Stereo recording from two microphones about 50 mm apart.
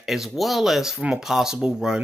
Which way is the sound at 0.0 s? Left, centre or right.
Centre.